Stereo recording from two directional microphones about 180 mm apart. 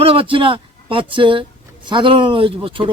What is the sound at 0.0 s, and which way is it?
Speech, 30° right (ahead or behind).